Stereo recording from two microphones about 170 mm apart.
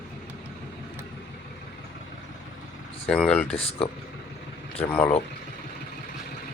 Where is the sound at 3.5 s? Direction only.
35° left (ahead or behind).